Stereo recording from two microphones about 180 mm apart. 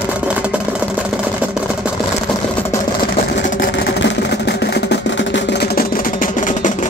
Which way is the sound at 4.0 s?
80° left.